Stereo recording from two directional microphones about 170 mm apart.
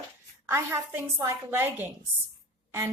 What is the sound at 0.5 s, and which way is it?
A woman's voice, 15° right (ahead or behind).